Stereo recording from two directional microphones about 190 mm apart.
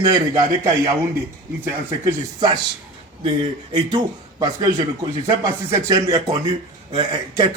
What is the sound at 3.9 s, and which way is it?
Speech, 20° right (ahead or behind).